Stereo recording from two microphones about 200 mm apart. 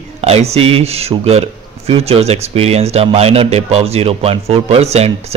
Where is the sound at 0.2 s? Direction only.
30° right (ahead or behind).